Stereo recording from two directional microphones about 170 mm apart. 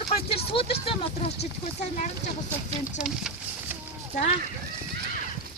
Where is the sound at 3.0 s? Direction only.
5° right (ahead or behind).